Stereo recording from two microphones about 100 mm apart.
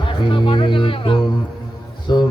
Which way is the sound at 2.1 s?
45° left (ahead or behind).